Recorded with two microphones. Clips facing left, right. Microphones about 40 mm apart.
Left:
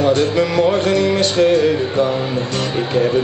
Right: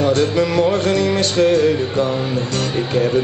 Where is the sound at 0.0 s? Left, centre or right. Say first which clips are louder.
Left 1 dB; left.